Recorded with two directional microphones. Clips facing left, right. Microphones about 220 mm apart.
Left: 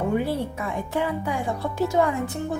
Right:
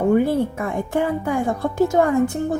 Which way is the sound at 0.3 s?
50° right (ahead or behind).